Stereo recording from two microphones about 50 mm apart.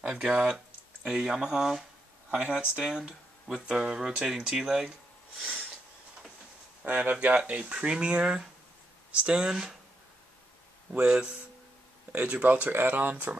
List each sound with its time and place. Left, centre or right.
0.0 s speech: centre
2.3 s speech: right; by 5.5 s centre
6.8 s speech: right
7.4 s speech: right
10.9 s speech: centre
12.1 s speech: right